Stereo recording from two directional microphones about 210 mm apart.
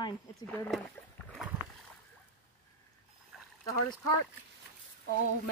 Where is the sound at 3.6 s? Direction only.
15° left (ahead or behind).